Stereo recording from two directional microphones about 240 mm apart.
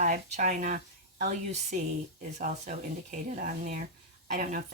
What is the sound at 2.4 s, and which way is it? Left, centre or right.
Speech, right.